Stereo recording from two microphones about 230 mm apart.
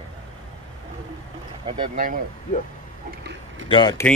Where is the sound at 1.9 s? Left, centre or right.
Right.